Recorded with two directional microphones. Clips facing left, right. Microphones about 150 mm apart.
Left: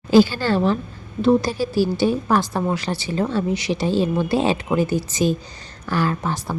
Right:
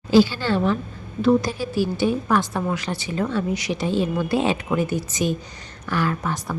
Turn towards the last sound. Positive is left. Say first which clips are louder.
# left 1 dB
turn(degrees=30)  # may be behind; listen again after turning